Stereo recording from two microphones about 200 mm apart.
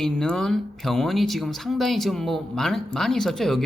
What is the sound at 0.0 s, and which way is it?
Speech, 5° left (ahead or behind).